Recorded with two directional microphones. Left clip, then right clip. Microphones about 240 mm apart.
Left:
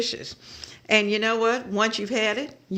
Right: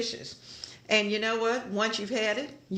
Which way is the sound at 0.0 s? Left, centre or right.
Left.